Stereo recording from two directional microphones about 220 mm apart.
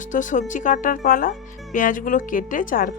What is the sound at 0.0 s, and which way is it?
A woman's voice, 35° left (ahead or behind).